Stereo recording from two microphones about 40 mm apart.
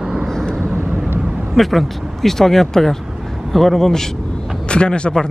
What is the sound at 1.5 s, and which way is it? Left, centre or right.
Speech, centre.